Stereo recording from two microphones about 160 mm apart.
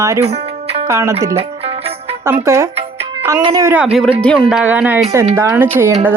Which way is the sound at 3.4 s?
30° right (ahead or behind).